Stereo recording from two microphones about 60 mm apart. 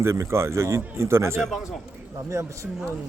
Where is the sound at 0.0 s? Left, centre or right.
Right.